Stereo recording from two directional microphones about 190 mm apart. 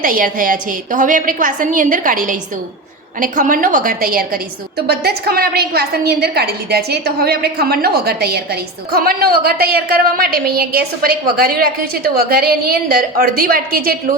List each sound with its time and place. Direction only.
0.0 s a woman's voice: 45° right (ahead or behind)